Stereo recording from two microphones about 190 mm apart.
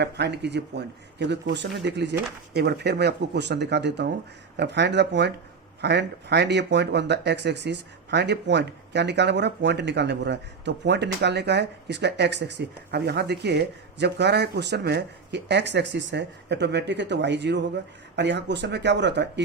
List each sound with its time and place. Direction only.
0.0 s speech: 60° right (ahead or behind)